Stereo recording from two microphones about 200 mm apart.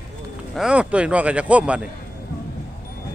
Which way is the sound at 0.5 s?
5° right (ahead or behind).